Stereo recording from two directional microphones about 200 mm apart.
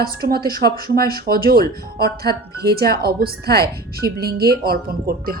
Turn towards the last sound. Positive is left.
turn(degrees=-50)  # may be behind; listen again after turning